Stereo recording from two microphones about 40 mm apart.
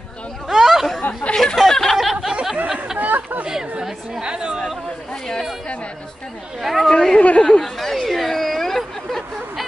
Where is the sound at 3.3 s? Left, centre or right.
Right.